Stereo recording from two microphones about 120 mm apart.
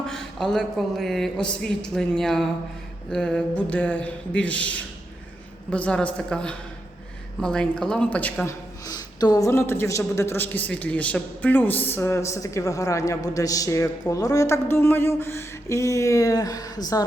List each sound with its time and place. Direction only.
0.0 s a sound: 5° left (ahead or behind)
3.1 s a man's voice: 5° left (ahead or behind)
8.4 s a woman's voice: 30° left (ahead or behind)